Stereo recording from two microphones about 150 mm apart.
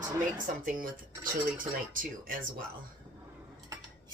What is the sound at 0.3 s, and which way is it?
Speech, 60° right (ahead or behind).